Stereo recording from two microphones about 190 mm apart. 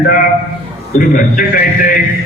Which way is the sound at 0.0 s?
45° left (ahead or behind).